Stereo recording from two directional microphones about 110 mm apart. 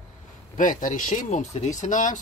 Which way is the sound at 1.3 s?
90° left.